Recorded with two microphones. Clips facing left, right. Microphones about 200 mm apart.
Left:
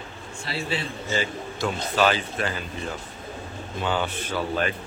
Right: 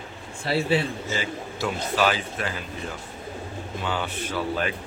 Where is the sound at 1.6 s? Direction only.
5° right (ahead or behind).